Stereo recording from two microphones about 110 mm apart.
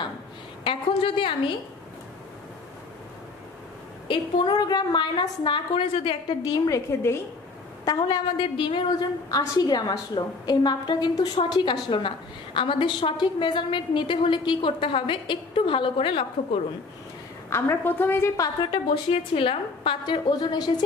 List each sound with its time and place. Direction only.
0.7 s a woman's voice: 55° left (ahead or behind)
4.1 s a woman's voice: 45° left (ahead or behind)
6.6 s a woman's voice: 25° left (ahead or behind)
8.4 s a woman's voice: 50° left (ahead or behind)
9.3 s a woman's voice: 35° left (ahead or behind); by 16.3 s 55° left (ahead or behind)
17.5 s a woman's voice: 20° left (ahead or behind)
18.6 s a woman's voice: 50° left (ahead or behind)